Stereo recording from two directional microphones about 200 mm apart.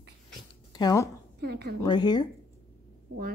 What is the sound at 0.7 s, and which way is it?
Speech, 15° left (ahead or behind).